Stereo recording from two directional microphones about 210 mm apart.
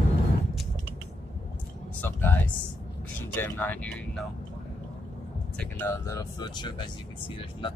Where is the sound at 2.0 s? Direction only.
10° left (ahead or behind).